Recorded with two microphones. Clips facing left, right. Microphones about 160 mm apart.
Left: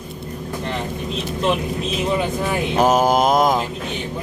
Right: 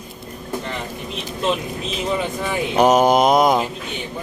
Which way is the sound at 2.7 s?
5° left (ahead or behind).